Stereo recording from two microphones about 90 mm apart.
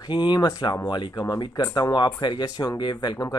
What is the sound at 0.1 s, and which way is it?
Speech, 55° left (ahead or behind).